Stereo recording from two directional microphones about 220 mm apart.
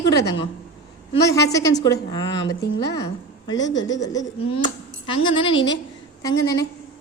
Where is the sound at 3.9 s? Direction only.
15° left (ahead or behind).